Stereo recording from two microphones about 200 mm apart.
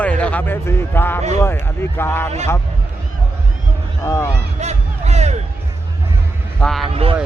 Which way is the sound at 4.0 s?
15° left (ahead or behind).